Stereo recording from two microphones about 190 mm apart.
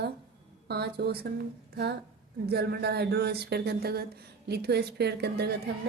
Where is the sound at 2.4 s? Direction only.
55° right (ahead or behind).